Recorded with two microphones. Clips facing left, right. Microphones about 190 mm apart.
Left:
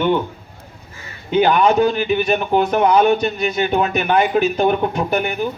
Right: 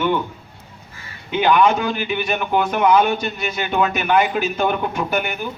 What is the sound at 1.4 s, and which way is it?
A man's voice, 40° left (ahead or behind).